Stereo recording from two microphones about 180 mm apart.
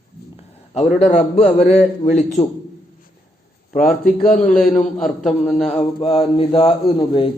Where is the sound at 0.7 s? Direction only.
35° left (ahead or behind).